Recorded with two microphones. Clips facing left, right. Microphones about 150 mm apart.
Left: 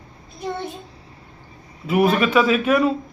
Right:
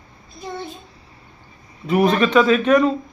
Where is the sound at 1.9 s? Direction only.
5° left (ahead or behind).